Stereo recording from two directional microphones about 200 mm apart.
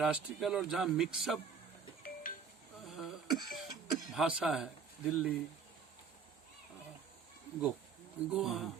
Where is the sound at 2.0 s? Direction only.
45° left (ahead or behind).